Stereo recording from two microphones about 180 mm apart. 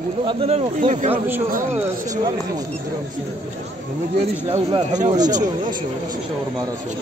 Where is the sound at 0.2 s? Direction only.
30° right (ahead or behind).